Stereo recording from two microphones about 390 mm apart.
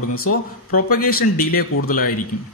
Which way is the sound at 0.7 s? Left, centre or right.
Left.